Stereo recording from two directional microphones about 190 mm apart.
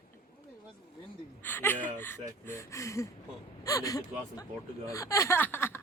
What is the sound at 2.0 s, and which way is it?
Speech, 10° left (ahead or behind).